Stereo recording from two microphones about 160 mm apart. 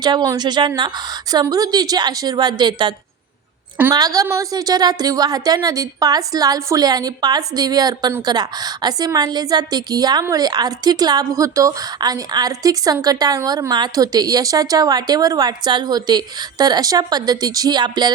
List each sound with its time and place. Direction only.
0.0 s a woman's voice: 25° right (ahead or behind)
3.9 s a woman's voice: 25° right (ahead or behind)